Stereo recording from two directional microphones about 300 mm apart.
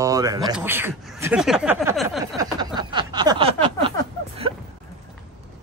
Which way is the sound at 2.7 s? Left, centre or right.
Centre.